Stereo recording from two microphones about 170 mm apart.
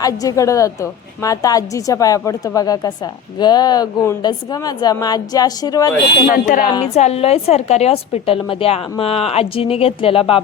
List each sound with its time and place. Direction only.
0.0 s a woman's voice: 20° left (ahead or behind)
6.3 s speech: 55° left (ahead or behind)
6.9 s a woman's voice: 40° left (ahead or behind)